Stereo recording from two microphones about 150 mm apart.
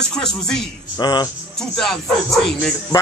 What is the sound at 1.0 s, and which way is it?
Speech, 25° left (ahead or behind).